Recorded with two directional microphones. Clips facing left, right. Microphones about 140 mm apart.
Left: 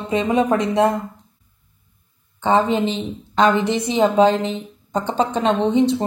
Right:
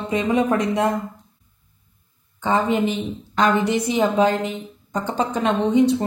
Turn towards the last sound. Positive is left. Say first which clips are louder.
# left 1 dB
turn(degrees=25)  # may be behind; listen again after turning